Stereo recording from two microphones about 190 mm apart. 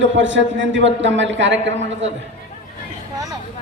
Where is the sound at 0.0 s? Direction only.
75° right (ahead or behind).